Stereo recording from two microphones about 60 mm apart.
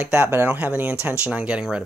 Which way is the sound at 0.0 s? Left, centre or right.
Right.